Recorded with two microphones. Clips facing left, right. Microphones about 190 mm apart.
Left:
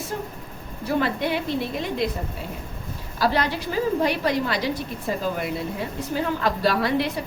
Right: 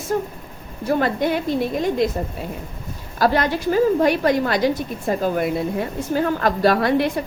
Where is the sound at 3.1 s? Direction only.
50° right (ahead or behind).